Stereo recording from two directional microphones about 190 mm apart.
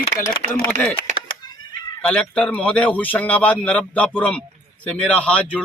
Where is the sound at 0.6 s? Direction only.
10° left (ahead or behind).